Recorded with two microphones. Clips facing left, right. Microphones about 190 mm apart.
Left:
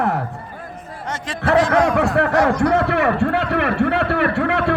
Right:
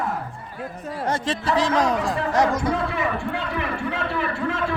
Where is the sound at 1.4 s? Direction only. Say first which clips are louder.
Left 8 dB; 70° left (ahead or behind).